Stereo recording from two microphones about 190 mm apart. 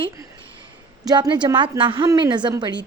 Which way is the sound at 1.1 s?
25° right (ahead or behind).